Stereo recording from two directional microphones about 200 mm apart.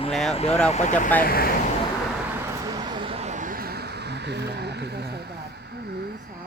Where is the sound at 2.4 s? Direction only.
15° right (ahead or behind); by 5.2 s 55° right (ahead or behind).